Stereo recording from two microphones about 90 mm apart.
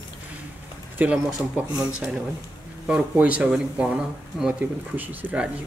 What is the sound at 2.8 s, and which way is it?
Speech, 15° right (ahead or behind).